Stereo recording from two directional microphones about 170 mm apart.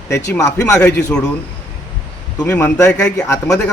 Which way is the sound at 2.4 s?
10° left (ahead or behind).